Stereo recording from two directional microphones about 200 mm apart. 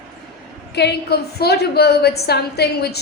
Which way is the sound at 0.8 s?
50° left (ahead or behind).